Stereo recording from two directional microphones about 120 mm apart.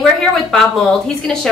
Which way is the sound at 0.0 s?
5° left (ahead or behind).